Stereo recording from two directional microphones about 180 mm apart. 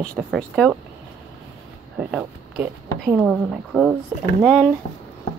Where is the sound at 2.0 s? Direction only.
5° right (ahead or behind).